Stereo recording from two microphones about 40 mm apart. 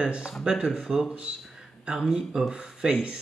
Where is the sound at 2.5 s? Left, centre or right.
Right.